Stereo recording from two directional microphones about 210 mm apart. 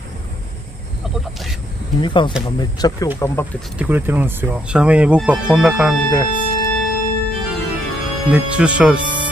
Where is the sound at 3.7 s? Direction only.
10° right (ahead or behind).